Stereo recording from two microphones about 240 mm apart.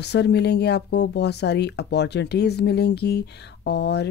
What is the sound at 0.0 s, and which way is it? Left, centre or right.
Speech, left.